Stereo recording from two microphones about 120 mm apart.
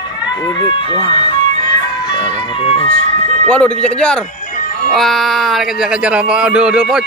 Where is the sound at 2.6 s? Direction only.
55° left (ahead or behind).